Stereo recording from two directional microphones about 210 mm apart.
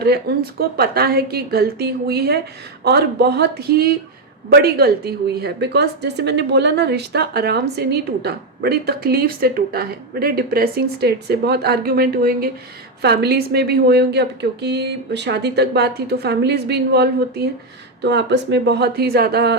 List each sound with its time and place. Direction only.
0.0 s a woman's voice: 50° right (ahead or behind)